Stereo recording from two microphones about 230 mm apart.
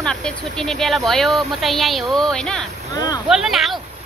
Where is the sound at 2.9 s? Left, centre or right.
Centre.